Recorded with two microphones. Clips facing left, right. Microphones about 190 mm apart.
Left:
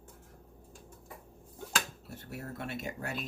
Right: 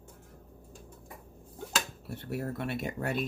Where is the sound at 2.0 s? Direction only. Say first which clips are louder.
Right 7 dB; 65° right (ahead or behind).